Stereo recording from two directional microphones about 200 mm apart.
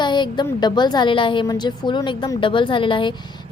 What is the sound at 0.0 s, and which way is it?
A woman's voice, 20° left (ahead or behind).